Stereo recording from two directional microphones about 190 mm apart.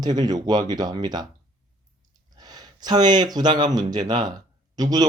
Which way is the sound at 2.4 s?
20° right (ahead or behind).